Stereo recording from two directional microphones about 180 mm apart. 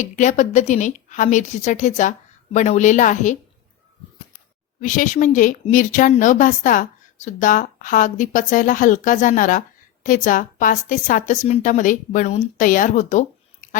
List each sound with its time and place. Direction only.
0.0 s speech: 45° left (ahead or behind)
4.8 s speech: 45° left (ahead or behind)